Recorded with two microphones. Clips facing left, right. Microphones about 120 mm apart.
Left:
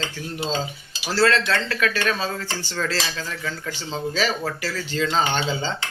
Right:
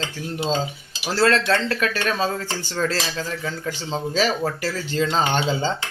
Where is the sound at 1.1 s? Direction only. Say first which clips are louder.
Right 1 dB; 40° right (ahead or behind).